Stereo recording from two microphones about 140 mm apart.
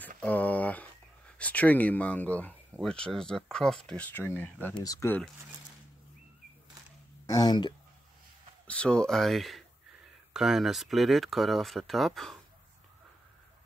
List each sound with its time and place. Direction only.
0.2 s a sound: 10° left (ahead or behind)
1.4 s speech: 10° left (ahead or behind)
7.2 s speech: 30° left (ahead or behind)
8.6 s speech: 5° left (ahead or behind)